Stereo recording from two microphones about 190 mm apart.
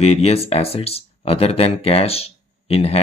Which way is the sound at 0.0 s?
35° left (ahead or behind).